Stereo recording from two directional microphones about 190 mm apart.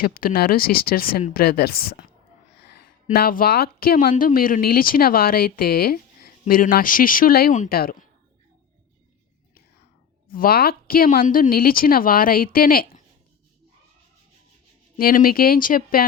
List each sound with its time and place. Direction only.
0.0 s speech: 50° left (ahead or behind)
3.1 s speech: 50° left (ahead or behind)
10.2 s speech: 50° left (ahead or behind)
14.9 s speech: 50° left (ahead or behind)